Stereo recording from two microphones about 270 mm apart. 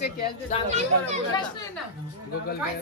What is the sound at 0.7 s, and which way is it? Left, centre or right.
Speech, right.